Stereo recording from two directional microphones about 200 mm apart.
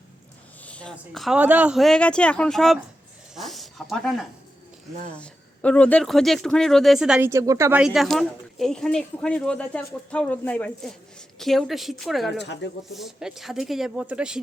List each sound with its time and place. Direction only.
0.6 s speech: 5° left (ahead or behind)
3.3 s a sound: centre (ahead or behind)
5.2 s speech: 5° left (ahead or behind)
7.3 s speech: 15° right (ahead or behind); by 12.3 s centre (ahead or behind)
12.4 s speech: 60° left (ahead or behind)
12.9 s speech: centre (ahead or behind)